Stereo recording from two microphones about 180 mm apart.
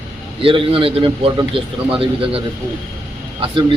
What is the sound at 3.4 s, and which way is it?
Speech, 30° right (ahead or behind).